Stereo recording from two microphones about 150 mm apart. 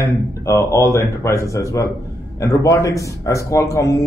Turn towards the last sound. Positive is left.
turn(degrees=20)  # may be behind; listen again after turning